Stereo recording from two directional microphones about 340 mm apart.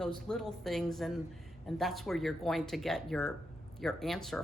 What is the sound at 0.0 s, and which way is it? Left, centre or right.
Speech, centre.